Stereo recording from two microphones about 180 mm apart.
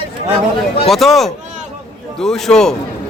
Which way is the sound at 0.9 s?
Centre (ahead or behind).